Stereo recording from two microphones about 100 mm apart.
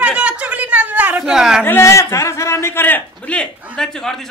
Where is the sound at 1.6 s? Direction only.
25° left (ahead or behind).